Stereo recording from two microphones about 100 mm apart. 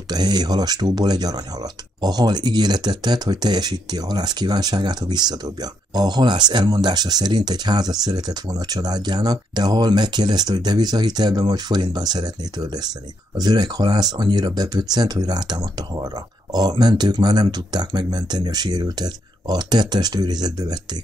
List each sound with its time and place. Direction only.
0.1 s speech: 45° right (ahead or behind)